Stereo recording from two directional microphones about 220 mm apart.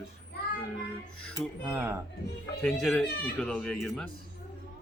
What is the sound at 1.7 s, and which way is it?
Speech, 10° right (ahead or behind).